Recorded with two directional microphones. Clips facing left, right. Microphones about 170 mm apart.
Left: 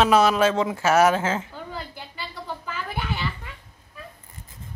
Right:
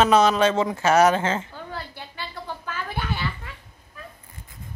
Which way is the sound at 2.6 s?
10° left (ahead or behind).